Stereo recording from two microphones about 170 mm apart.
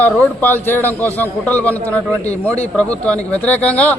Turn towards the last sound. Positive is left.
turn(degrees=10)  # may be behind; listen again after turning